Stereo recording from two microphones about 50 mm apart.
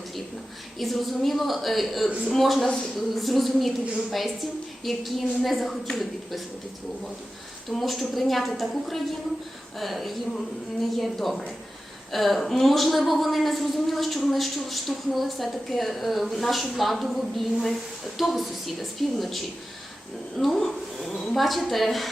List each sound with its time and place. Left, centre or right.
0.8 s a woman's voice: centre
2.0 s speech: right
2.3 s a woman's voice: centre
4.8 s a woman's voice: centre
7.7 s a woman's voice: centre